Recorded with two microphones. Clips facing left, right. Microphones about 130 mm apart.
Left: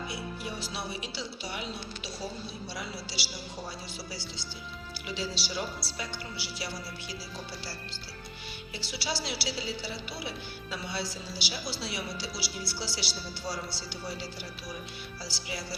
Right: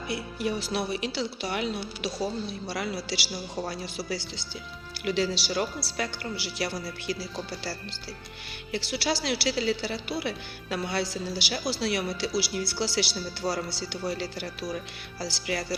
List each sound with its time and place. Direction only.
0.1 s a woman's voice: 65° right (ahead or behind)